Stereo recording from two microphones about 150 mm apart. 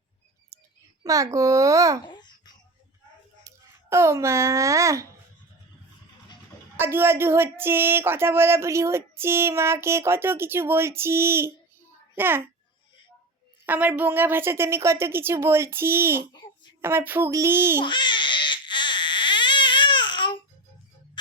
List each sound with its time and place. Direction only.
1.0 s a child's voice: 20° right (ahead or behind)
2.0 s babbling: 30° left (ahead or behind)
3.4 s a child's voice: 20° right (ahead or behind)
6.7 s a child's voice: 15° right (ahead or behind)
13.7 s speech: 10° right (ahead or behind)
17.7 s baby cry: 30° left (ahead or behind)